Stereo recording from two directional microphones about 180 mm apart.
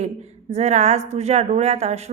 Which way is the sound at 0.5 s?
40° right (ahead or behind).